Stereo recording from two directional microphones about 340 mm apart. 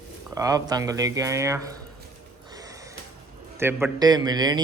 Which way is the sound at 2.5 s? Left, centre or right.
Centre.